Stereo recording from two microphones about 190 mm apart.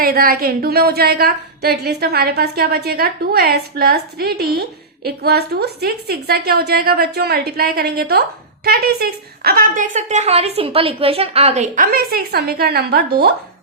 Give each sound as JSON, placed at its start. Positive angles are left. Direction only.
{"t": 0.0, "sound": "a woman's voice", "side_deg": -55}